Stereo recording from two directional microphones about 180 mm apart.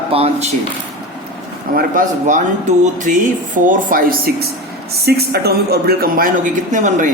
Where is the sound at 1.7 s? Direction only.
50° right (ahead or behind).